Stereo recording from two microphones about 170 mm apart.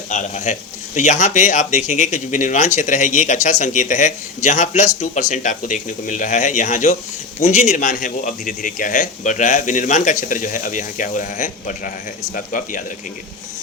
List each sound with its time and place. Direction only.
0.1 s speech: 45° left (ahead or behind)